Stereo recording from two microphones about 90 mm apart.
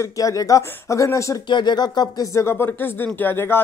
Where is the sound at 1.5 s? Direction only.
55° left (ahead or behind).